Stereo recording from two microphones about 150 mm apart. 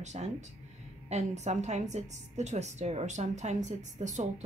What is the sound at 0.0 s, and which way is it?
A woman's voice, 50° right (ahead or behind).